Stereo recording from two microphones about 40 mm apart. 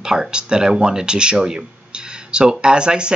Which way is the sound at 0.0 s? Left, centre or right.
Centre.